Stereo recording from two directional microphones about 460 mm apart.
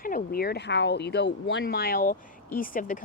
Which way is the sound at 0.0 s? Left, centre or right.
Centre.